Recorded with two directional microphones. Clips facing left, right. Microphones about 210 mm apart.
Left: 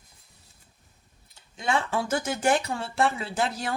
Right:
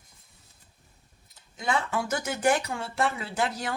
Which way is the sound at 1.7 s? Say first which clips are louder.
Left 2 dB; 30° left (ahead or behind).